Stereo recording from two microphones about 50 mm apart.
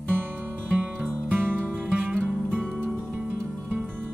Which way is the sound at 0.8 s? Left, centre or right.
Right.